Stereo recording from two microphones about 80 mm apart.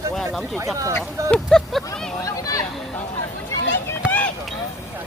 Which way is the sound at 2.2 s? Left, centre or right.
Left.